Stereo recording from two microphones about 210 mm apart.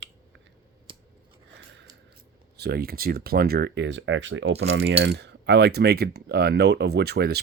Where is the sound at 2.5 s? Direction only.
50° right (ahead or behind).